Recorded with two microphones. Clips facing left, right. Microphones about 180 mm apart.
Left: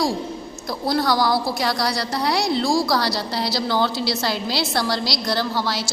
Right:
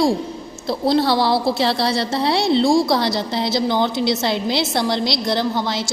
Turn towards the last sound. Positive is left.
turn(degrees=-20)  # may be behind; listen again after turning